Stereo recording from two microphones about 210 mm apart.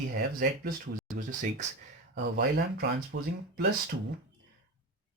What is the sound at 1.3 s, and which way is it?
Speech, 35° right (ahead or behind).